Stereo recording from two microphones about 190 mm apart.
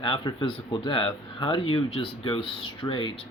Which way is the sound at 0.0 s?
25° left (ahead or behind).